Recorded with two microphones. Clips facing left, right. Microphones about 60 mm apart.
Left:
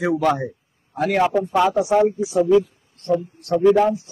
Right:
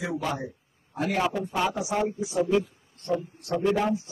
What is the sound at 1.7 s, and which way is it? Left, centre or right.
Speech, left.